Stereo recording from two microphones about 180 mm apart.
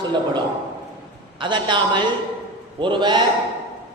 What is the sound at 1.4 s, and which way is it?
A man's voice, 25° right (ahead or behind).